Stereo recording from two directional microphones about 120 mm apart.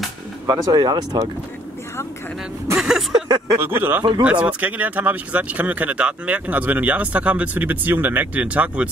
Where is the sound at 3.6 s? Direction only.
20° right (ahead or behind).